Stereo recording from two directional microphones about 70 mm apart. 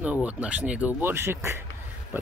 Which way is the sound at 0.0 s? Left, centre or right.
Centre.